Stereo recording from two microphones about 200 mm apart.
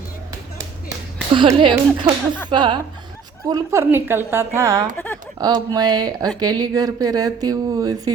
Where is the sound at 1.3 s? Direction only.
25° right (ahead or behind).